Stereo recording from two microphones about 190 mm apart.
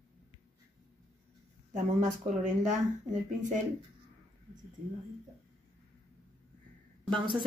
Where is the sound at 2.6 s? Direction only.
40° right (ahead or behind).